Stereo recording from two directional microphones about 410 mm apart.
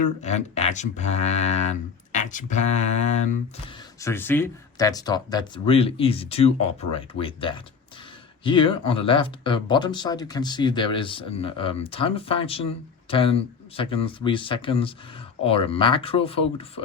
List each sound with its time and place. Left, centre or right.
0.0 s speech: centre
4.0 s speech: centre